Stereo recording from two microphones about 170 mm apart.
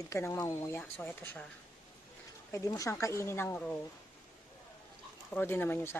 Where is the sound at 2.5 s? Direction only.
20° left (ahead or behind).